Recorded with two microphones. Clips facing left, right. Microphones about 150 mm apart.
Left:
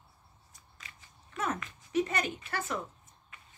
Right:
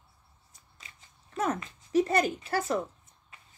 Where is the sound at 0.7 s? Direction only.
30° right (ahead or behind).